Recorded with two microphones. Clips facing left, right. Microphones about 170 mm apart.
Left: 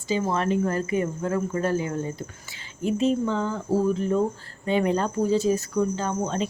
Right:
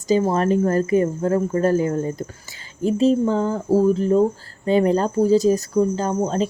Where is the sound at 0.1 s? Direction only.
40° right (ahead or behind).